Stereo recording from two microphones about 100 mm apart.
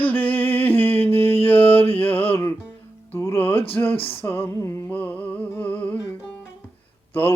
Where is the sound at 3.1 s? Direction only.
25° left (ahead or behind).